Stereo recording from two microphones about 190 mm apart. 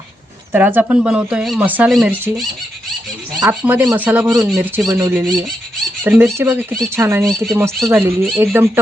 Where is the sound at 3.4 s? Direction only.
10° right (ahead or behind).